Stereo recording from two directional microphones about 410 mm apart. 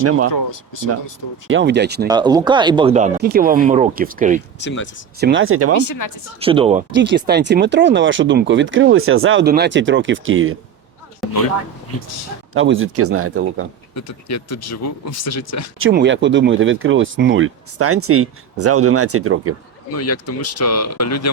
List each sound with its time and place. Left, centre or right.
1.5 s speech: right
2.0 s speech: centre
4.6 s speech: left
5.2 s speech: right
5.7 s speech: left
6.4 s speech: centre; by 10.5 s right
12.5 s speech: right
13.9 s speech: left
15.8 s speech: right
19.9 s speech: left